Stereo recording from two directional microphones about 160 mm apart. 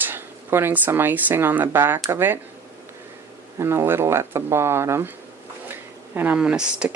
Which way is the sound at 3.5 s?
15° right (ahead or behind).